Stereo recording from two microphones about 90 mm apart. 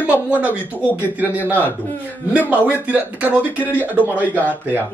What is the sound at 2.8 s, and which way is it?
A man's voice, 15° right (ahead or behind).